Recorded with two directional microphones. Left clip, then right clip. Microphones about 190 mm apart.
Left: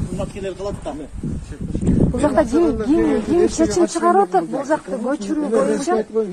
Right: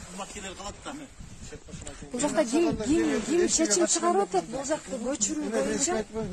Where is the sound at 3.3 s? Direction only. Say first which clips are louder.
Left 7 dB; 65° right (ahead or behind).